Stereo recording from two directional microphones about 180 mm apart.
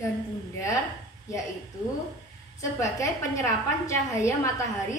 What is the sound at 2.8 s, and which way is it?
A woman's voice, 15° left (ahead or behind).